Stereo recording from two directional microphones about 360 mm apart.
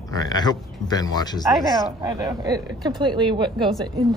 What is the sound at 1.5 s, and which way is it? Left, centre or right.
A woman's voice, centre.